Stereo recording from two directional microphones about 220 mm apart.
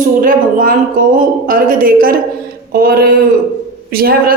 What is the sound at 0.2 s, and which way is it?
A woman's voice, 40° right (ahead or behind).